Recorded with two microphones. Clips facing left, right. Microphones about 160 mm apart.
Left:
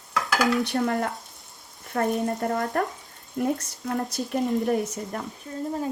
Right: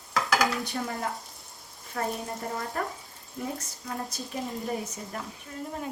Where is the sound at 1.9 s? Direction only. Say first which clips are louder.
Left 6 dB; 55° left (ahead or behind).